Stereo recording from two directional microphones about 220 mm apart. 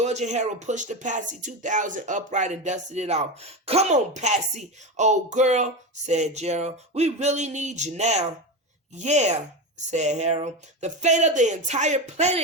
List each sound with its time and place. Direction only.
0.0 s speech: 30° right (ahead or behind)